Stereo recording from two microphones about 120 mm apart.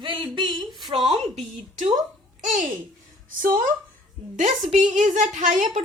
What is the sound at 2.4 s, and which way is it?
Speech, 90° right.